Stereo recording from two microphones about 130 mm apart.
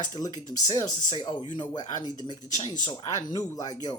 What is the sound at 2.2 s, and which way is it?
Speech, 35° left (ahead or behind).